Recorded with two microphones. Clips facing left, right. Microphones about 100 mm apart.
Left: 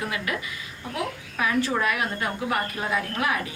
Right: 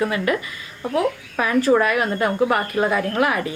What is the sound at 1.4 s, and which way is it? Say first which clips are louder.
A woman's voice: right 7 dB; 45° right (ahead or behind).